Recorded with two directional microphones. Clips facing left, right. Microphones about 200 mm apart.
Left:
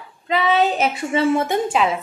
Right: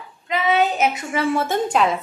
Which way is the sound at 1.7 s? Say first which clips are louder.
Even; centre (ahead or behind).